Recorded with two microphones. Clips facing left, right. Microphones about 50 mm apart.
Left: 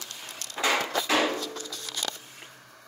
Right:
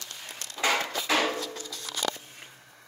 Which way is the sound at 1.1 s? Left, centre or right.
Centre.